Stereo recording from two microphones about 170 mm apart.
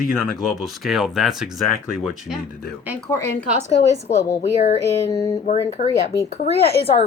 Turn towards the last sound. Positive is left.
turn(degrees=35)  # may be behind; listen again after turning